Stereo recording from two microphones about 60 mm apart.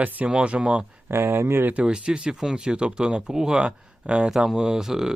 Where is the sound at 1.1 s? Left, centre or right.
Right.